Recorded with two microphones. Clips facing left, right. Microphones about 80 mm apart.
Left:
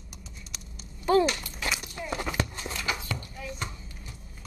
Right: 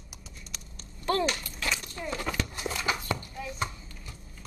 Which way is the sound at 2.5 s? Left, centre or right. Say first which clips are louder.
Right 3 dB; centre.